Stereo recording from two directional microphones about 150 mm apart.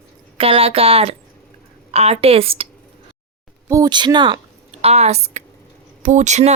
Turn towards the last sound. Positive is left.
turn(degrees=-50)  # may be behind; listen again after turning